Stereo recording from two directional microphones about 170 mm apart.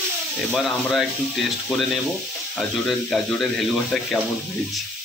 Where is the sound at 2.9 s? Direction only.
Centre (ahead or behind).